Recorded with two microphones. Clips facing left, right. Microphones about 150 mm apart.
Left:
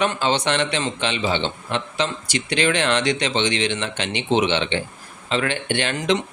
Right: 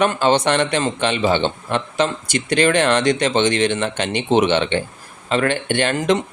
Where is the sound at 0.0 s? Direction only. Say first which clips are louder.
Right 5 dB; 50° right (ahead or behind).